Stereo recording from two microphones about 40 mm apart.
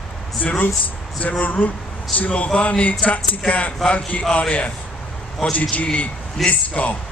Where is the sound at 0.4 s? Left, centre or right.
Left.